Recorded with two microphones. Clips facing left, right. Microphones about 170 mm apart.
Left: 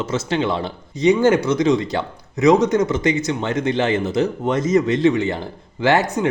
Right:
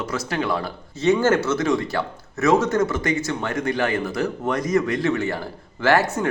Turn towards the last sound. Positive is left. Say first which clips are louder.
# left 2 dB
turn(degrees=20)  # may be behind; listen again after turning